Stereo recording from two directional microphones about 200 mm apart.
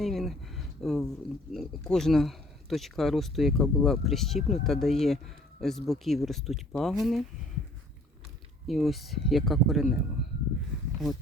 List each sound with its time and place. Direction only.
0.0 s a sound: centre (ahead or behind)
1.5 s speech: 5° left (ahead or behind)
8.6 s speech: centre (ahead or behind)